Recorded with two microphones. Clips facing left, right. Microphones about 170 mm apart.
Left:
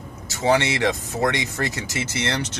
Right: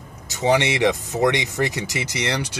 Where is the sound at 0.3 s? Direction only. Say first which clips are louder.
Right 1 dB; 15° right (ahead or behind).